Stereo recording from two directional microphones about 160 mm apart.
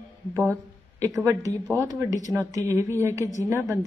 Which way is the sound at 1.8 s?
20° right (ahead or behind).